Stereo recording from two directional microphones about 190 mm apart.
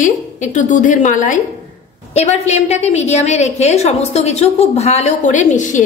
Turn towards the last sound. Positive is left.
turn(degrees=40)  # may be behind; listen again after turning